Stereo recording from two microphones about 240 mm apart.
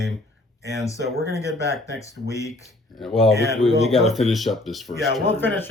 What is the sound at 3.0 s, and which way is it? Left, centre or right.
Speech, centre.